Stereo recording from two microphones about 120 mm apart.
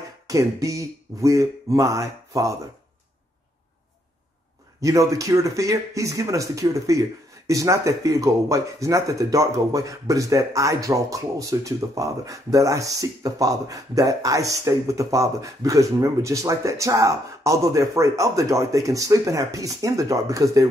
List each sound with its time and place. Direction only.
0.3 s speech: 30° right (ahead or behind)
4.8 s speech: 30° right (ahead or behind)